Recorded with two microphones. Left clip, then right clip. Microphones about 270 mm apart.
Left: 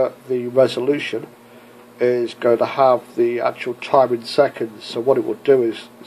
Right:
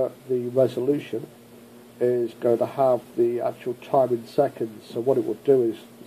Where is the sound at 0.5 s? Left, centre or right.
Centre.